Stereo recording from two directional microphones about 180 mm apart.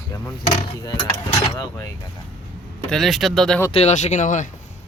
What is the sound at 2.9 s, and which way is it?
Speech, centre (ahead or behind).